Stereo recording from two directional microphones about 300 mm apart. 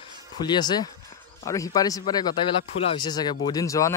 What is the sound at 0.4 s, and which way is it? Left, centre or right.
Speech, centre.